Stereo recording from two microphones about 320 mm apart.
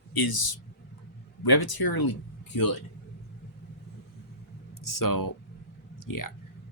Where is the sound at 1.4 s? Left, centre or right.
Left.